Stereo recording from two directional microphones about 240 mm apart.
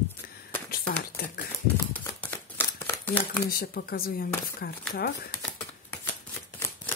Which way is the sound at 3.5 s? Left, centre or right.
Left.